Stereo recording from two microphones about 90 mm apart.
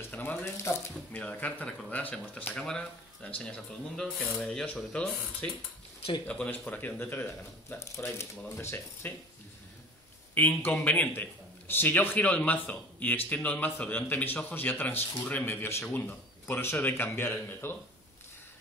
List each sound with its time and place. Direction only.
0.1 s a man's voice: 20° left (ahead or behind)
7.8 s a man's voice: 35° left (ahead or behind)
10.3 s a man's voice: 20° left (ahead or behind)